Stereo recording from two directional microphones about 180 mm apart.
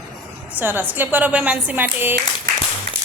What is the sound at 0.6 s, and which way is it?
A woman's voice, 10° right (ahead or behind).